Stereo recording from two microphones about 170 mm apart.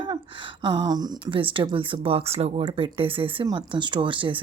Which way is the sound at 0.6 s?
25° right (ahead or behind).